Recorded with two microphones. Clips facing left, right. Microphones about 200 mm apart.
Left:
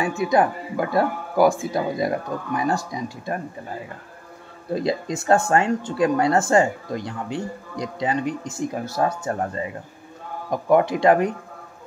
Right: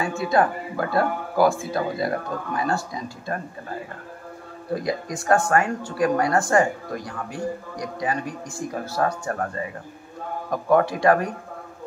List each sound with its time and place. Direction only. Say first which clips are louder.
0.0 s speech: left 2 dB; 15° left (ahead or behind)
4.7 s speech: left 3 dB; 25° left (ahead or behind)